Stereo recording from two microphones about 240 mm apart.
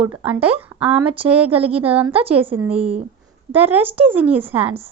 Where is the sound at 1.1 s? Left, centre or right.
Right.